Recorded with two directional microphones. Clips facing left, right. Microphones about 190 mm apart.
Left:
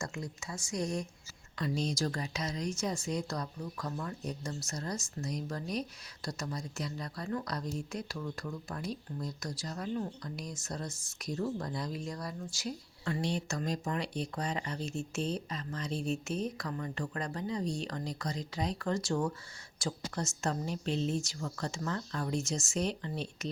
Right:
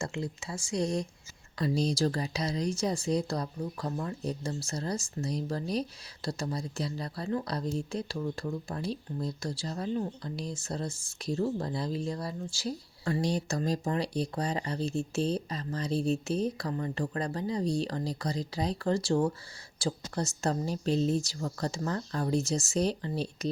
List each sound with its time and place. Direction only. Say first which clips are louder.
0.0 s speech: right 5 dB; 30° right (ahead or behind)